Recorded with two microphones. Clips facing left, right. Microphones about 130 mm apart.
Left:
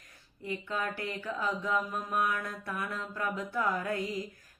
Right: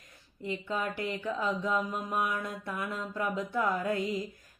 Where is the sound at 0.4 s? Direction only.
20° right (ahead or behind).